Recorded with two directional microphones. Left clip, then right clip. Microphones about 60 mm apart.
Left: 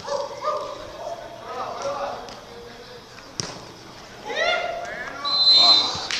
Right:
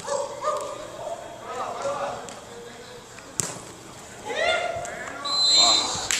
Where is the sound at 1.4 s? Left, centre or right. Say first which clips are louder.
Even; centre.